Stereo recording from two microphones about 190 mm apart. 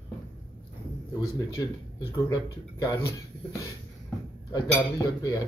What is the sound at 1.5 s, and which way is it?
Speech, 15° left (ahead or behind).